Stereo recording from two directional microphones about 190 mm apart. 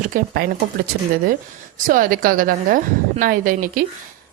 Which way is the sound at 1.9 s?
45° right (ahead or behind).